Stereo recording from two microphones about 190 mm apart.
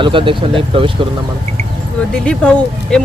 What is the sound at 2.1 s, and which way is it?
Speech, 5° left (ahead or behind).